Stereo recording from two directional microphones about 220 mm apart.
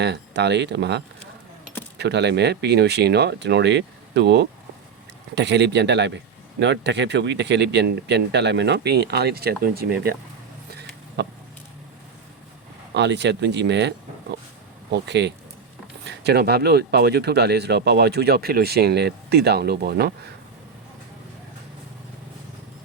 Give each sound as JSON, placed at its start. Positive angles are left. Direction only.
{"t": 0.0, "sound": "speech", "side_deg": -50}
{"t": 10.7, "sound": "a sound", "side_deg": -50}
{"t": 12.9, "sound": "speech", "side_deg": -50}